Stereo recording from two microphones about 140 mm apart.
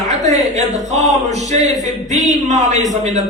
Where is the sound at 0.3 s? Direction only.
55° right (ahead or behind).